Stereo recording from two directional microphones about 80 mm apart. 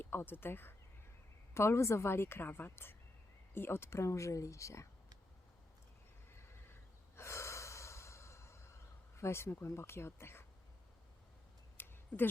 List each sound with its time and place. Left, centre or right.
0.0 s speech: left
7.2 s gasp: left
9.1 s speech: left
11.8 s tick: left